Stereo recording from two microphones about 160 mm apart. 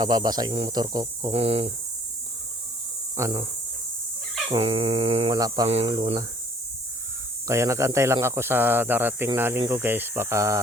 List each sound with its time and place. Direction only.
0.0 s speech: 25° right (ahead or behind)
1.3 s dog: 40° right (ahead or behind)
3.2 s speech: 20° right (ahead or behind)
4.4 s dog: 35° right (ahead or behind)
5.3 s speech: 25° right (ahead or behind)
5.6 s dog: 40° right (ahead or behind)
7.4 s speech: 20° right (ahead or behind)